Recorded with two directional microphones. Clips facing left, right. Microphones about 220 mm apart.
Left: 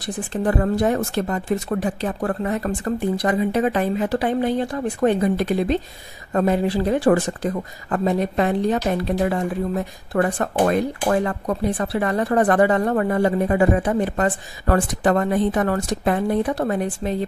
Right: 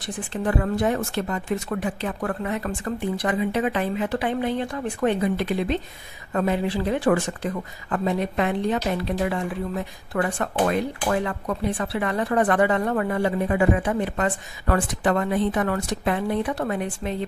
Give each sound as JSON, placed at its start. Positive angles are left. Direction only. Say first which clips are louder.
{"t": 0.0, "sound": "speech", "louder": "left 4 dB", "side_deg": 40}